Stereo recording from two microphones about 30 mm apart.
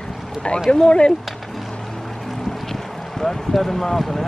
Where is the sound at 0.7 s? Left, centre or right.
Left.